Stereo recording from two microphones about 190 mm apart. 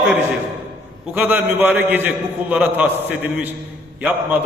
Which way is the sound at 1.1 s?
10° right (ahead or behind).